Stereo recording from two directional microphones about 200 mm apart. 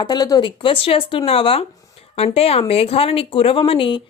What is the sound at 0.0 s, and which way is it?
A woman's voice, 20° left (ahead or behind).